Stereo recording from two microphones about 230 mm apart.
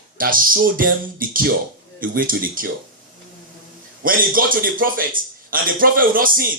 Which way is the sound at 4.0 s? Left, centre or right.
Right.